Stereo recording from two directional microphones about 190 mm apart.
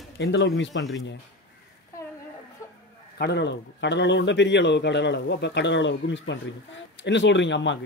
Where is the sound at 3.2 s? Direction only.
60° left (ahead or behind).